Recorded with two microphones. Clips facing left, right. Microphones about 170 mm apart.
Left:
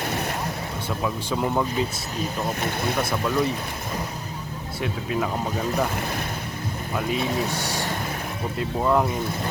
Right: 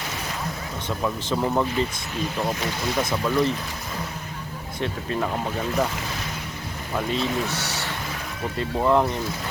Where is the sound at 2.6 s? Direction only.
55° left (ahead or behind).